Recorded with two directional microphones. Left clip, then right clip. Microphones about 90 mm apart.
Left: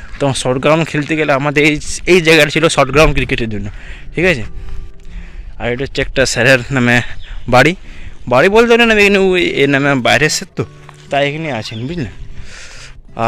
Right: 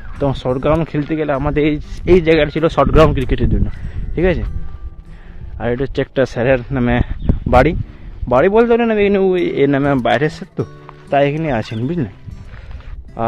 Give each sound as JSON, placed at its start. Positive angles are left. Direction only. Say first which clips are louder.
{"t": 0.2, "sound": "a man's voice", "louder": "left 3 dB", "side_deg": -10}
{"t": 2.9, "sound": "a man's voice", "louder": "left 2 dB", "side_deg": -25}
{"t": 5.6, "sound": "speech", "louder": "left 1 dB", "side_deg": -45}
{"t": 6.1, "sound": "a man's voice", "louder": "left 4 dB", "side_deg": -25}
{"t": 6.5, "sound": "a man's voice", "louder": "left 4 dB", "side_deg": 5}
{"t": 6.8, "sound": "a man's voice", "louder": "left 6 dB", "side_deg": -10}
{"t": 9.4, "sound": "a man's voice", "louder": "left 3 dB", "side_deg": -20}
{"t": 11.1, "sound": "speech", "louder": "right 1 dB", "side_deg": -60}